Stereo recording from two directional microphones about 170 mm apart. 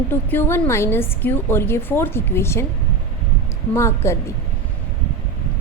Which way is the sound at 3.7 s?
15° left (ahead or behind).